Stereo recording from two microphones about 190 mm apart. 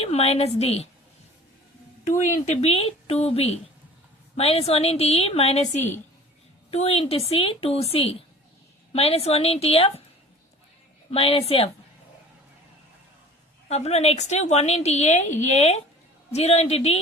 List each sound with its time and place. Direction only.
0.0 s a woman's voice: 35° left (ahead or behind)
2.0 s a woman's voice: 40° left (ahead or behind)
11.1 s a woman's voice: 30° left (ahead or behind)
13.7 s a woman's voice: 35° left (ahead or behind)